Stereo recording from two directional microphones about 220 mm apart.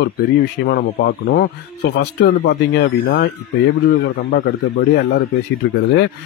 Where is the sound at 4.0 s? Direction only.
50° left (ahead or behind).